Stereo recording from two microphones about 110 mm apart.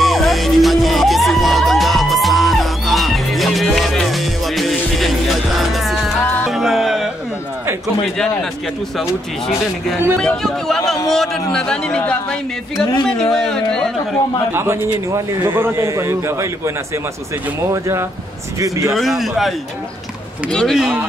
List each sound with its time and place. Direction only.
0.0 s music: centre (ahead or behind)
10.2 s a man's voice: 5° left (ahead or behind)
14.5 s a man's voice: 20° right (ahead or behind)
18.6 s a man's voice: 30° right (ahead or behind)
18.9 s a man's voice: centre (ahead or behind)